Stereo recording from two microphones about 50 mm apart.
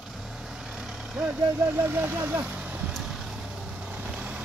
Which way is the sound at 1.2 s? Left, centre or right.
Centre.